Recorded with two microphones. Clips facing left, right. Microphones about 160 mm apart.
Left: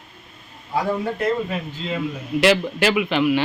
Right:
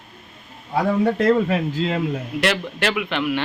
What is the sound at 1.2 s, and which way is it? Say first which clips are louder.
Speech: right 5 dB; 90° right.